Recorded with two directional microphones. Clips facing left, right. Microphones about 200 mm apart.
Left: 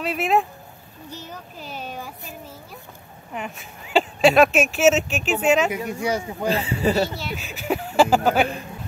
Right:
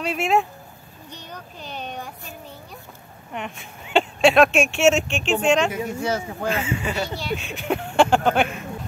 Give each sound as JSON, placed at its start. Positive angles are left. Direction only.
{"t": 0.0, "sound": "speech", "side_deg": 0}
{"t": 3.3, "sound": "speech", "side_deg": 0}
{"t": 6.5, "sound": "speech", "side_deg": 35}
{"t": 7.2, "sound": "speech", "side_deg": 0}